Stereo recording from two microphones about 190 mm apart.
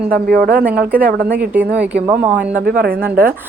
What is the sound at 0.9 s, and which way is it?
Speech, 10° right (ahead or behind).